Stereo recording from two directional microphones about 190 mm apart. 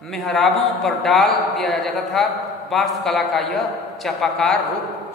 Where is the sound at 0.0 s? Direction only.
Centre (ahead or behind).